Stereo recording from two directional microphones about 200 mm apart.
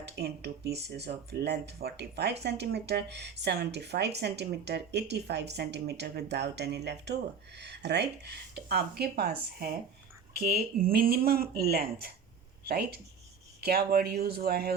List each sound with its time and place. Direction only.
0.0 s speech: 55° right (ahead or behind)